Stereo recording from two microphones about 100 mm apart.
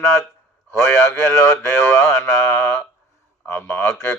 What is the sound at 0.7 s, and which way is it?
Speech, 25° left (ahead or behind).